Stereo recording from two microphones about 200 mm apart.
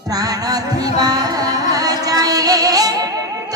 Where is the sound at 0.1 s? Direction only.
20° right (ahead or behind).